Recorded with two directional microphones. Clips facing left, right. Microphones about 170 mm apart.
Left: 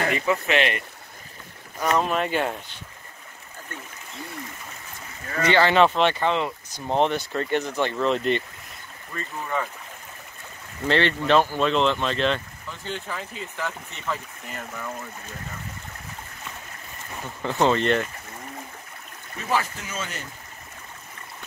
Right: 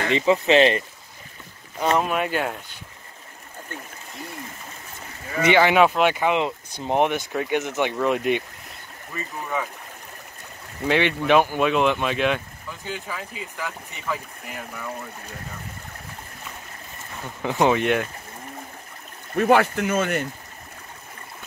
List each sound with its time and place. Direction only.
0.1 s speech: 25° right (ahead or behind)
2.0 s speech: 5° right (ahead or behind)
5.3 s speech: 15° right (ahead or behind)
10.9 s speech: 10° right (ahead or behind)
17.4 s speech: 15° right (ahead or behind)
19.3 s speech: 60° right (ahead or behind)